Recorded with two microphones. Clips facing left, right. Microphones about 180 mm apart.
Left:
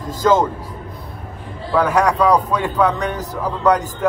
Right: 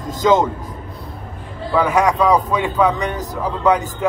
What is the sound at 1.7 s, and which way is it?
A man's voice, centre (ahead or behind).